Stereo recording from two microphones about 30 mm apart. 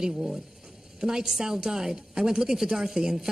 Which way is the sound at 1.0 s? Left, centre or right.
Right.